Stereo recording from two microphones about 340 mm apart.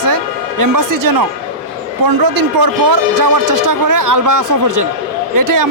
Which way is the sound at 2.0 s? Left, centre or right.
Right.